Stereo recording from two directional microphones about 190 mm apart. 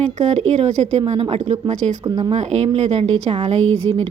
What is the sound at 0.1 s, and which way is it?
A woman's voice, 35° right (ahead or behind).